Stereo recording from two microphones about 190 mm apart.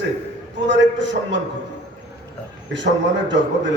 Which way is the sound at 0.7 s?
75° right (ahead or behind).